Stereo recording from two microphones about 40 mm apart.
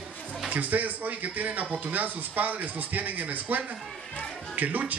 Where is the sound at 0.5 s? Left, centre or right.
Right.